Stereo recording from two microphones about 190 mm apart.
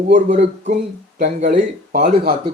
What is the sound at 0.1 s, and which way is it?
Speech, 40° right (ahead or behind).